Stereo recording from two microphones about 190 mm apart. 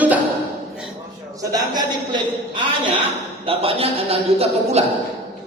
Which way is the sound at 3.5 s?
30° right (ahead or behind).